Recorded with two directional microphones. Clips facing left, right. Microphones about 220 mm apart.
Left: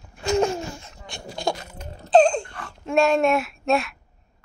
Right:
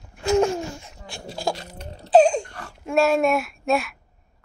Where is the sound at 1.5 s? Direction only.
30° right (ahead or behind).